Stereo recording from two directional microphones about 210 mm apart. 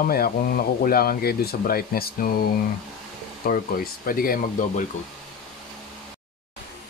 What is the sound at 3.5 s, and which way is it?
Speech, 45° left (ahead or behind).